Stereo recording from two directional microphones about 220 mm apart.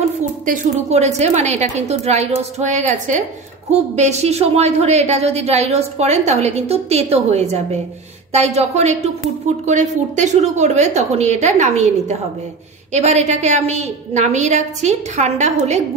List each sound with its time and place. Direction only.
0.2 s a woman's voice: 30° right (ahead or behind)